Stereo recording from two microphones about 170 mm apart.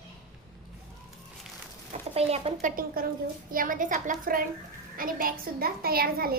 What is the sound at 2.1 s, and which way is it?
Speech, 35° right (ahead or behind).